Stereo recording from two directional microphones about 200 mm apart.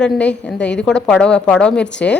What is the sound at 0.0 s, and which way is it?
A woman's voice, 5° left (ahead or behind).